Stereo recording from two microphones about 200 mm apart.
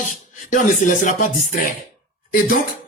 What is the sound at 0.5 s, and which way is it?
Music, 40° left (ahead or behind).